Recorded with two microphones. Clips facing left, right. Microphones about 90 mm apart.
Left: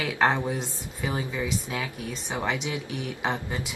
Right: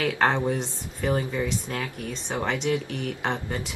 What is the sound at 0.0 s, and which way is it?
Speech, 5° left (ahead or behind).